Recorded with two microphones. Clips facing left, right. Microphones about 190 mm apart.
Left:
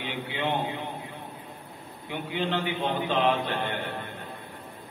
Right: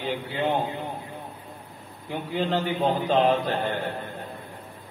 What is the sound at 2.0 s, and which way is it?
A man's voice, 40° right (ahead or behind).